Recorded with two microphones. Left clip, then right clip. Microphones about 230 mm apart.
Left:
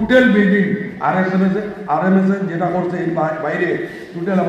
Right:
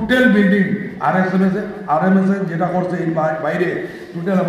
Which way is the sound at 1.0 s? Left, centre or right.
Right.